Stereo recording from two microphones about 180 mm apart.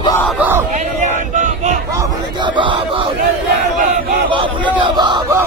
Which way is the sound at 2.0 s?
25° right (ahead or behind).